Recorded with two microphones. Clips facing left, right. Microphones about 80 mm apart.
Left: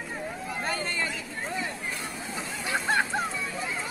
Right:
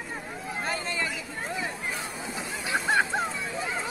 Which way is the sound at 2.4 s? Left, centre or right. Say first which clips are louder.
Right 1 dB; centre.